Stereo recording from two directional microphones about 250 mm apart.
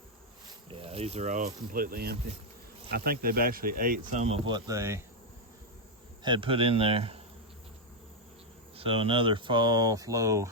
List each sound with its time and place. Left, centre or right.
0.7 s speech: right
6.2 s speech: centre
8.7 s speech: right